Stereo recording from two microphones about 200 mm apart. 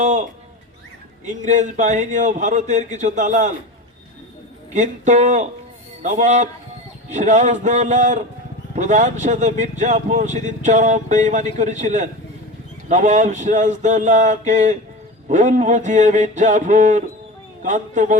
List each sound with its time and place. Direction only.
0.0 s a man's voice: 35° right (ahead or behind)
4.7 s a man's voice: 35° right (ahead or behind)